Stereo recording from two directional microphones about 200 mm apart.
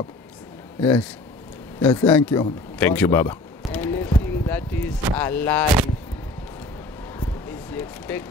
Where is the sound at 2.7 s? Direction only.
10° left (ahead or behind).